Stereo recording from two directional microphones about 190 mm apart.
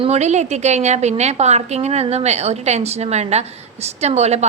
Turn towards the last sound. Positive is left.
turn(degrees=-35)  # may be behind; listen again after turning